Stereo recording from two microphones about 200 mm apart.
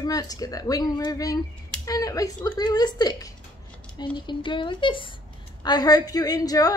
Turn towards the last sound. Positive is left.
turn(degrees=20)  # may be behind; listen again after turning